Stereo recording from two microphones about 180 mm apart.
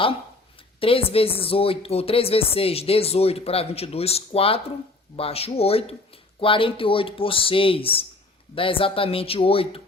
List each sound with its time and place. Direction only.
0.8 s speech: 30° left (ahead or behind)